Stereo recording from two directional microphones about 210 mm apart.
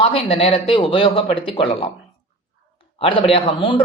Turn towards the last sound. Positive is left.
turn(degrees=25)  # may be behind; listen again after turning